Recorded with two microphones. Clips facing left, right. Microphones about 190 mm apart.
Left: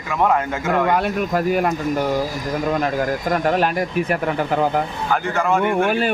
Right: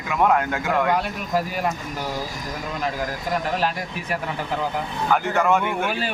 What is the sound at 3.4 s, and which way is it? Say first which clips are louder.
Speech: left 6 dB; 55° left (ahead or behind).